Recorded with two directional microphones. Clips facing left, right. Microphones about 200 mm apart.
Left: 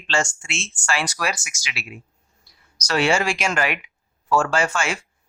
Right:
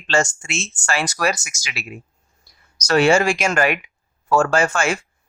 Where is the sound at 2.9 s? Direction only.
45° right (ahead or behind).